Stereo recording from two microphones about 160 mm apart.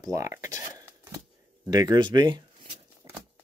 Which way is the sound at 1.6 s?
25° right (ahead or behind).